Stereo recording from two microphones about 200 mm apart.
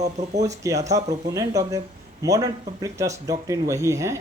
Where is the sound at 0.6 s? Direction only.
15° right (ahead or behind).